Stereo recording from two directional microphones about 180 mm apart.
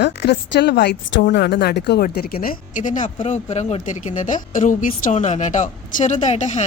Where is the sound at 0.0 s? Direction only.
70° left (ahead or behind).